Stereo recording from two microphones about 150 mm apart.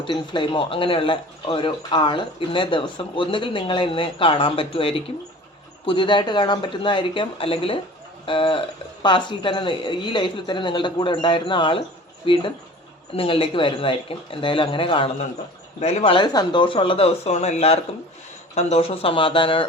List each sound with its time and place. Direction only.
0.0 s speech: 35° left (ahead or behind)
15.8 s speech: 45° left (ahead or behind)
16.1 s speech: 25° left (ahead or behind)